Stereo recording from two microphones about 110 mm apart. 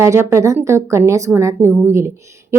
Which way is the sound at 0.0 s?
25° right (ahead or behind).